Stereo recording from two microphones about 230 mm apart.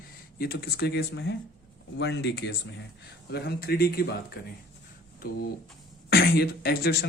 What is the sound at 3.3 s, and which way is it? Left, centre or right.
Speech, left.